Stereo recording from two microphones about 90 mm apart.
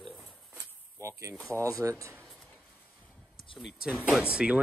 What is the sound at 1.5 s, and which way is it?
Speech, 35° right (ahead or behind).